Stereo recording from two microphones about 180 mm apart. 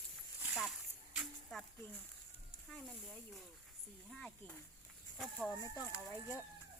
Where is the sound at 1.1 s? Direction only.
Centre (ahead or behind).